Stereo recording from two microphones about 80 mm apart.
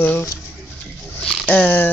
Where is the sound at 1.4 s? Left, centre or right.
Centre.